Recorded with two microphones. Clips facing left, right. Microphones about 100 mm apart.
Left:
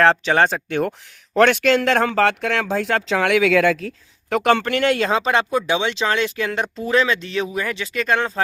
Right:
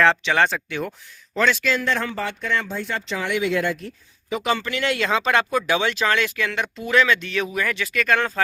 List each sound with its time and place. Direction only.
0.0 s speech: 40° left (ahead or behind); by 3.8 s 90° left
4.3 s speech: 70° left (ahead or behind); by 8.3 s 25° left (ahead or behind)